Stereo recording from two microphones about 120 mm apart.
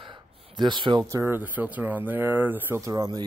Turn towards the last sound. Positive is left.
turn(degrees=-30)  # may be behind; listen again after turning